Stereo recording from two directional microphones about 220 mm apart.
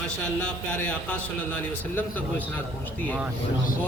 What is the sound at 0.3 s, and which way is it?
A man's voice, 5° left (ahead or behind).